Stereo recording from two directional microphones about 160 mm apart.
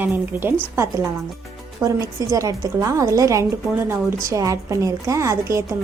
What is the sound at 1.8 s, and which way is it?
A woman's voice, 20° right (ahead or behind).